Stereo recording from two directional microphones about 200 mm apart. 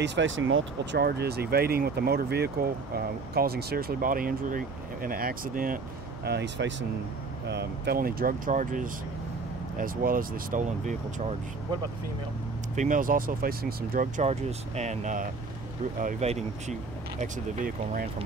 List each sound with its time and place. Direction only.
0.0 s speech: 65° right (ahead or behind)
1.0 s speech: 55° right (ahead or behind)
6.2 s speech: 60° right (ahead or behind); by 11.3 s 40° right (ahead or behind)
12.7 s speech: 40° right (ahead or behind)